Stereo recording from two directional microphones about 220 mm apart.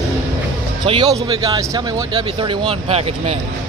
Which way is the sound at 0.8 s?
20° right (ahead or behind).